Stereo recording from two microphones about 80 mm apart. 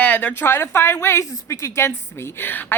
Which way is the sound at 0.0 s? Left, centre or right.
Centre.